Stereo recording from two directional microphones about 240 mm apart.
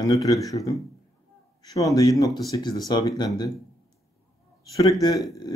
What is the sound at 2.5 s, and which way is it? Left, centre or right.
Speech, centre.